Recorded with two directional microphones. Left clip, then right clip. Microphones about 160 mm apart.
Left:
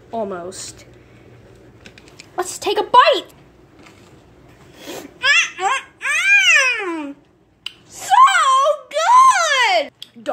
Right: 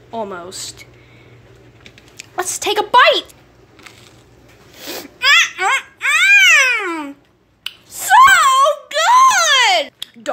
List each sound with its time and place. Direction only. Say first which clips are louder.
0.1 s a woman's voice: even; 15° left (ahead or behind)
2.1 s speech: right 2 dB; 10° left (ahead or behind)
4.7 s baby cry: right 4 dB; centre (ahead or behind)
7.6 s a sound: right 5 dB; 5° left (ahead or behind)